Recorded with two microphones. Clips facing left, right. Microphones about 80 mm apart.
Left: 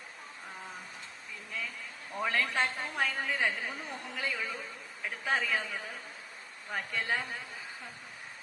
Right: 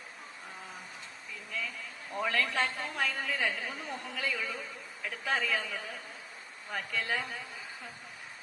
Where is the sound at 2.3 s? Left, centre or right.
Left.